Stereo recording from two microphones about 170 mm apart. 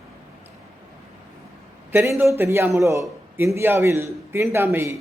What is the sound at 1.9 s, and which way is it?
A man's voice, 15° right (ahead or behind).